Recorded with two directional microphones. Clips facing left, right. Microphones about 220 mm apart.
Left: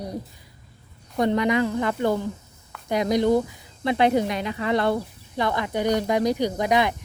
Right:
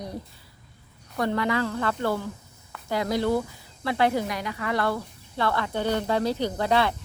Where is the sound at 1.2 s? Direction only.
20° left (ahead or behind).